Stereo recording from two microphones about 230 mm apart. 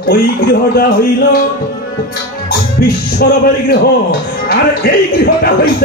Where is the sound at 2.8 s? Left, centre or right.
Left.